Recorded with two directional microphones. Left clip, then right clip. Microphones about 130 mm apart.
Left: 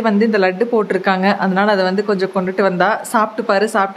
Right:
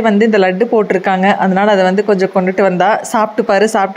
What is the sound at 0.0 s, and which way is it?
Speech, 25° right (ahead or behind).